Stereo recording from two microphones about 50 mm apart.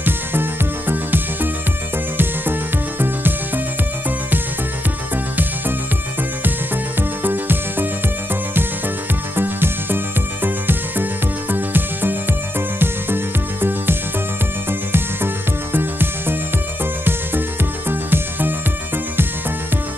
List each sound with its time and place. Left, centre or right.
0.0 s music: right
3.0 s music: right
7.0 s music: right
9.3 s music: right
17.8 s music: right